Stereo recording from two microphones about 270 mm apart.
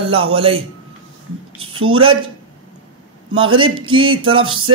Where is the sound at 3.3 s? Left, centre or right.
Centre.